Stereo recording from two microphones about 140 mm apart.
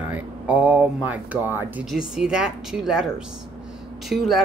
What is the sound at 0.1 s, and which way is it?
Speech, 10° right (ahead or behind).